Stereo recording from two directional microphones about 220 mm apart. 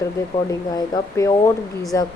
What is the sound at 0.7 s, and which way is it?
Speech, 15° left (ahead or behind).